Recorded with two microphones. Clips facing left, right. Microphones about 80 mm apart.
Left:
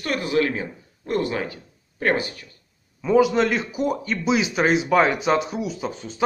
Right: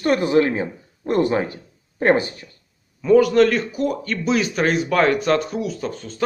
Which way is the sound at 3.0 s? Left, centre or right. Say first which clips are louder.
Right 4 dB; centre.